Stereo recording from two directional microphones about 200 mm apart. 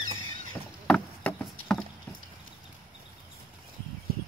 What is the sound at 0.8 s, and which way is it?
Rowboat, 5° left (ahead or behind).